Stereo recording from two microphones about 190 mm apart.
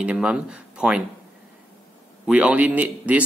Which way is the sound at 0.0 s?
5° right (ahead or behind).